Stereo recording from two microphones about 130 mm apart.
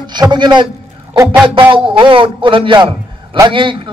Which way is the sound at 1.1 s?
25° right (ahead or behind).